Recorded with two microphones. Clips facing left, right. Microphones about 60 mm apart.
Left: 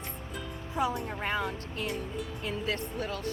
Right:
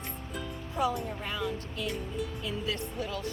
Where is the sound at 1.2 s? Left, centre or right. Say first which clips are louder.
Left 2 dB; left.